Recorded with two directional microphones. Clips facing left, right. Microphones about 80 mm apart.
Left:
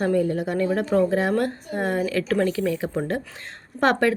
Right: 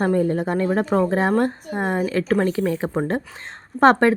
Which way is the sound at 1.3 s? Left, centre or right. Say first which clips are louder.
Right 3 dB; right.